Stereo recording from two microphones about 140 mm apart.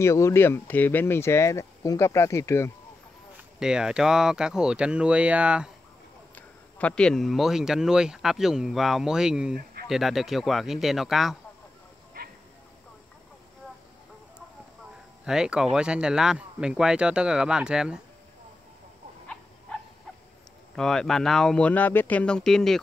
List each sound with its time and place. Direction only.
0.0 s speech: 20° left (ahead or behind)
3.5 s speech: 5° right (ahead or behind)
6.3 s speech: 10° left (ahead or behind)
15.2 s speech: 5° right (ahead or behind)
20.7 s speech: 5° left (ahead or behind)